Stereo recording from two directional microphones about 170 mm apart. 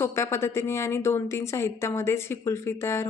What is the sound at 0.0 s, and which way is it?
A woman's voice, 15° left (ahead or behind).